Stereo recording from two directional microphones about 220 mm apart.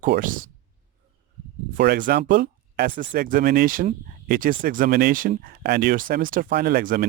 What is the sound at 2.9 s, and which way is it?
Speech, 60° right (ahead or behind).